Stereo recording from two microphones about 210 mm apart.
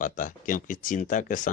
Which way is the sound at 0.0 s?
40° left (ahead or behind).